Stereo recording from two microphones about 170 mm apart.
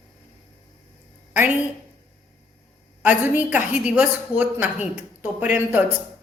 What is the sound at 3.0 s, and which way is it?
A woman's voice, 10° right (ahead or behind).